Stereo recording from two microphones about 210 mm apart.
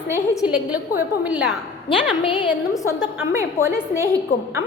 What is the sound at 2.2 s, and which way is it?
Speech, 20° left (ahead or behind).